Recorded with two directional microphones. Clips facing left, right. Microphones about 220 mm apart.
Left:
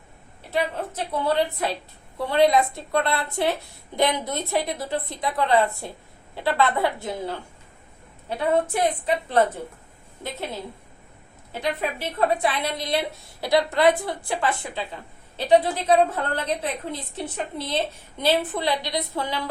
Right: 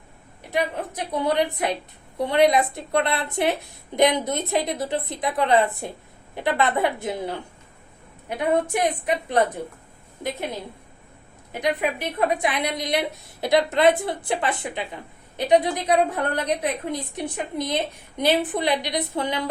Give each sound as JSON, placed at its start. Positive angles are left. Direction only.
{"t": 0.5, "sound": "a woman's voice", "side_deg": -15}
{"t": 11.5, "sound": "a woman's voice", "side_deg": -15}